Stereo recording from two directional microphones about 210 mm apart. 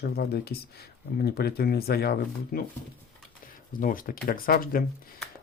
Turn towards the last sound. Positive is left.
turn(degrees=45)  # may be behind; listen again after turning